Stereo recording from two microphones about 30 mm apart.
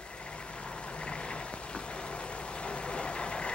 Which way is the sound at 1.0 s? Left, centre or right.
Left.